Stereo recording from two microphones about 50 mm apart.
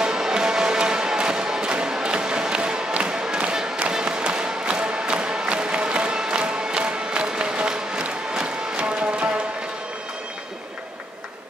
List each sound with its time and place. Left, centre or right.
0.0 s music: centre